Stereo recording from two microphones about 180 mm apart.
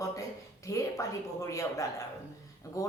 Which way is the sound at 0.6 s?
20° left (ahead or behind).